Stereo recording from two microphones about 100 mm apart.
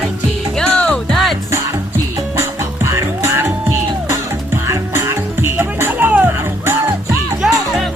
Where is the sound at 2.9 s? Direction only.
30° right (ahead or behind).